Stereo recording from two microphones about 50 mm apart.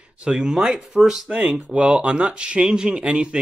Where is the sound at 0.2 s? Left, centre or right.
Centre.